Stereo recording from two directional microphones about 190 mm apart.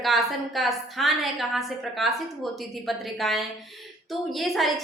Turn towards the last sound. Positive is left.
turn(degrees=0)  # may be behind; listen again after turning